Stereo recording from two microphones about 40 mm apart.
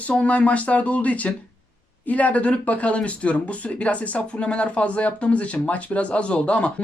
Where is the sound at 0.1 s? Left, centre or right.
Left.